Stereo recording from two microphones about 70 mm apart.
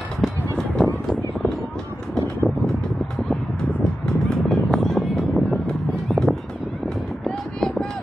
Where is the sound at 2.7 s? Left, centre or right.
Centre.